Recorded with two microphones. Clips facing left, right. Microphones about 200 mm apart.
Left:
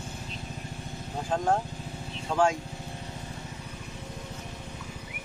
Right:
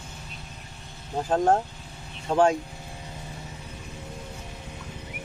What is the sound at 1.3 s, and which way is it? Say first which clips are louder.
Speech: right 5 dB; 40° right (ahead or behind).